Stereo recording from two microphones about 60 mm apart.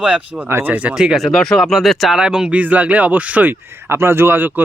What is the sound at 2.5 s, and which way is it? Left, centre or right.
Speech, right.